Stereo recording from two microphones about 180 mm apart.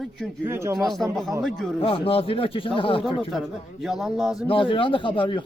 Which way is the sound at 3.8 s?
Centre (ahead or behind).